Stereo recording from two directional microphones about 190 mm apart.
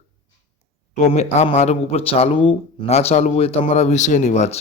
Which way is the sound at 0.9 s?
35° left (ahead or behind).